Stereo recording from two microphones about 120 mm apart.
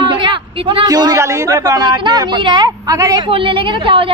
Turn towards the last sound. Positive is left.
turn(degrees=-45)  # may be behind; listen again after turning